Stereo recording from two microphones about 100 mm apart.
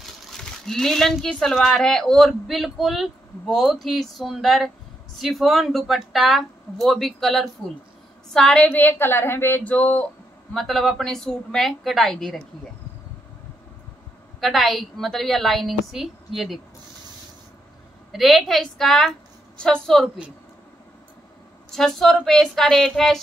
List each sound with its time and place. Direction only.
0.0 s a woman's voice: 5° left (ahead or behind)
8.6 s speech: 20° left (ahead or behind)
10.5 s speech: 5° left (ahead or behind)
14.4 s speech: centre (ahead or behind)
18.1 s a woman's voice: centre (ahead or behind)
21.6 s speech: 5° left (ahead or behind)